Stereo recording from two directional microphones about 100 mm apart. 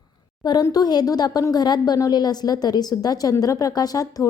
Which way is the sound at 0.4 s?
45° left (ahead or behind).